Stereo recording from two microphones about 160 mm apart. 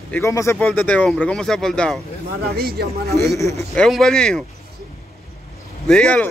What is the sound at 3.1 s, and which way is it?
Speech, 20° left (ahead or behind).